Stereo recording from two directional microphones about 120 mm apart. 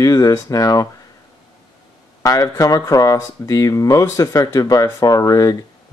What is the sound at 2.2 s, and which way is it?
Speech, 30° left (ahead or behind).